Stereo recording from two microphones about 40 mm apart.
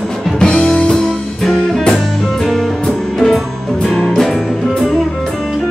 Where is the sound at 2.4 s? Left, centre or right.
Centre.